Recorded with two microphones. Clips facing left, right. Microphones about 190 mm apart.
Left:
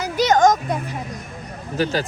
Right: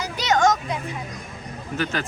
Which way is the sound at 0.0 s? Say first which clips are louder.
Left 5 dB; 50° left (ahead or behind).